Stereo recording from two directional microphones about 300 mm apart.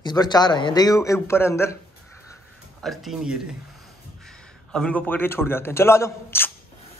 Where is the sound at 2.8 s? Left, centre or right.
Centre.